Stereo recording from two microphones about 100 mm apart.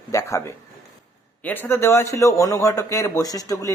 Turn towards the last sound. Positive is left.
turn(degrees=35)  # may be behind; listen again after turning